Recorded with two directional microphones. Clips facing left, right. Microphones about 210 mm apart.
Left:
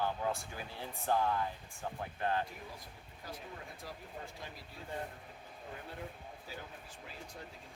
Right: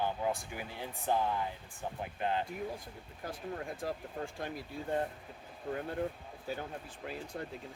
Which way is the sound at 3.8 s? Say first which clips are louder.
Right 9 dB; 50° right (ahead or behind).